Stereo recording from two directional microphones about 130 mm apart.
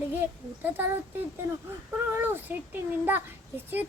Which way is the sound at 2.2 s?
15° right (ahead or behind).